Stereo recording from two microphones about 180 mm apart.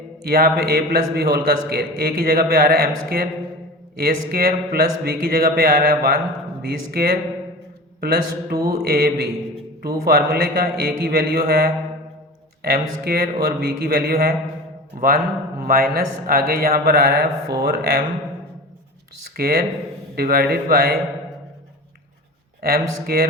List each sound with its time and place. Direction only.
0.2 s a man's voice: 60° right (ahead or behind)
19.4 s a man's voice: 60° right (ahead or behind)
22.6 s a man's voice: 60° right (ahead or behind)